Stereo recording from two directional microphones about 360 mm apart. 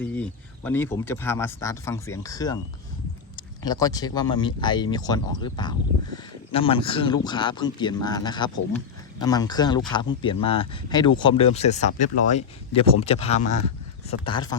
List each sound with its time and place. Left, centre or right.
0.0 s speech: centre